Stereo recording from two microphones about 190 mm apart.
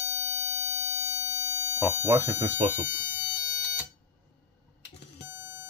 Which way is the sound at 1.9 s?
15° right (ahead or behind).